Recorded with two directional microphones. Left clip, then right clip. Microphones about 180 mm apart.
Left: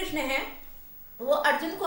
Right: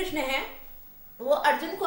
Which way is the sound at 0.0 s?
20° right (ahead or behind).